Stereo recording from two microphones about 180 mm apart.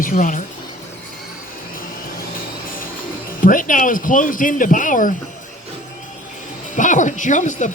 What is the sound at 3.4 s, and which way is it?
Speech, 50° left (ahead or behind).